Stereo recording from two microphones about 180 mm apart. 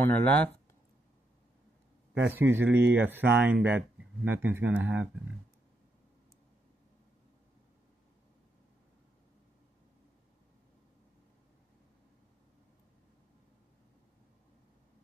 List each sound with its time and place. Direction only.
0.0 s speech: 10° left (ahead or behind)
2.2 s speech: 10° right (ahead or behind)
3.3 s speech: 70° right (ahead or behind)
4.2 s speech: 10° right (ahead or behind)